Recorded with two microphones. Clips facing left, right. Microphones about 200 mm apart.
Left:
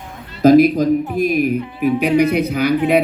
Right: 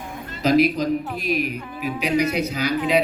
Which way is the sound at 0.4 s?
50° left (ahead or behind).